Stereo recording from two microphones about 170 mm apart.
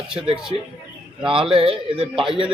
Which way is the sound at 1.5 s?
30° right (ahead or behind).